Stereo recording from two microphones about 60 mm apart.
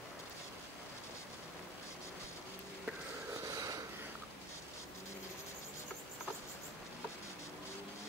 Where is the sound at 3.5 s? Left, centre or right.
Right.